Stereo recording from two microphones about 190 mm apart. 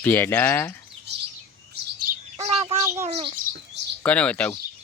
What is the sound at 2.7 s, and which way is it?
Bird, 15° right (ahead or behind).